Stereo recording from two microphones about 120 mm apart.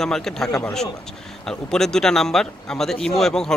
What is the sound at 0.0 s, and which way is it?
Speech, 5° left (ahead or behind).